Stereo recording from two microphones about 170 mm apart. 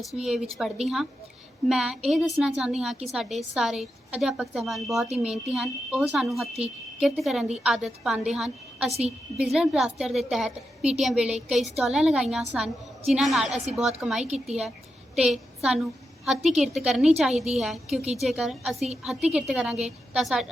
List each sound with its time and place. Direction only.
0.2 s a woman's voice: centre (ahead or behind)
8.9 s a woman's voice: 40° right (ahead or behind)
9.4 s a woman's voice: 5° right (ahead or behind)
17.3 s a woman's voice: 40° right (ahead or behind)
18.2 s a woman's voice: centre (ahead or behind)